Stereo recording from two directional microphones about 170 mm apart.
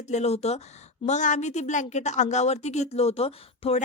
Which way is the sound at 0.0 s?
40° left (ahead or behind).